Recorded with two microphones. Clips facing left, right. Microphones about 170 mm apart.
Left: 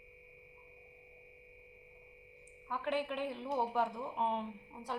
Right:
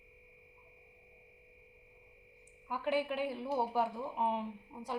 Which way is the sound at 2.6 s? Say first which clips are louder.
Right 2 dB; 10° right (ahead or behind).